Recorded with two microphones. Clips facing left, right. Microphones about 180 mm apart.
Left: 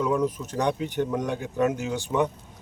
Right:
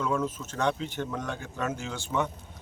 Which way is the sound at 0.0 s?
15° left (ahead or behind).